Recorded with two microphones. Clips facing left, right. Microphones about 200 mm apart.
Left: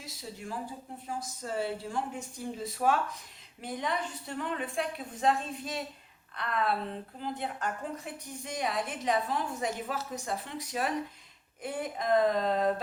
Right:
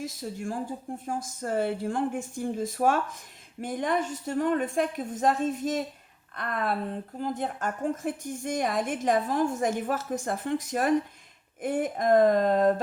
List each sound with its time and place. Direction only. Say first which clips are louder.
0.0 s a woman's voice: right 9 dB; 50° right (ahead or behind)